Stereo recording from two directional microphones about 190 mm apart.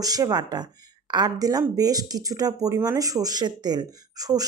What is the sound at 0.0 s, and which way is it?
Speech, 20° right (ahead or behind).